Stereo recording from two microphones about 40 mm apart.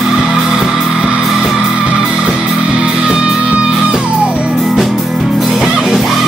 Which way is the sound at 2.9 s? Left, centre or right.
Centre.